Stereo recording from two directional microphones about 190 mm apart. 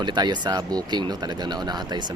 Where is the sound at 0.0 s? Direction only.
25° right (ahead or behind).